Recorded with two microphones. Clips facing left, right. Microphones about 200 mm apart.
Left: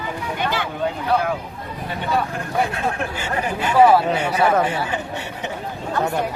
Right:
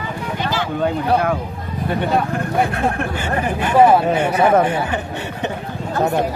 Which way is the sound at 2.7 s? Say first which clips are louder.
Right 4 dB; 55° right (ahead or behind).